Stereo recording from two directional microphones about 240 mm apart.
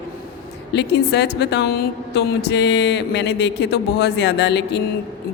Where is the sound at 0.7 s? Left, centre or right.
Left.